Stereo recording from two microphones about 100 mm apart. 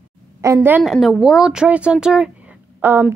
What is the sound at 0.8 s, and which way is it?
Speech, centre (ahead or behind).